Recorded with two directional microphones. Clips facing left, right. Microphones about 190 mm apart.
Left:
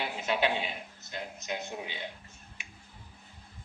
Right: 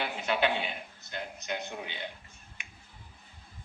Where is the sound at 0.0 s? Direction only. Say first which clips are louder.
Even; centre (ahead or behind).